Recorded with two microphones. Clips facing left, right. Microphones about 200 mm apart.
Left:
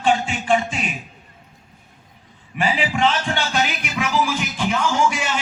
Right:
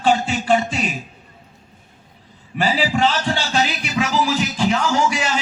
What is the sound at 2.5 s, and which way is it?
Music, 40° right (ahead or behind).